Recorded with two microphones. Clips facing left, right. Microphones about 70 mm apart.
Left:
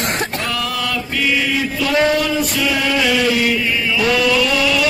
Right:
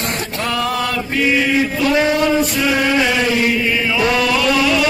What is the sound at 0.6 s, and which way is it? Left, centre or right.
Chant, right.